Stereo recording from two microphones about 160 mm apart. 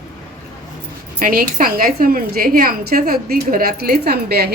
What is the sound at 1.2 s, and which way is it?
A woman's voice, 65° right (ahead or behind).